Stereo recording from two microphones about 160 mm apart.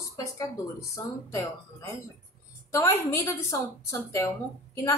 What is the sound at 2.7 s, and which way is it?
Speech, 15° left (ahead or behind).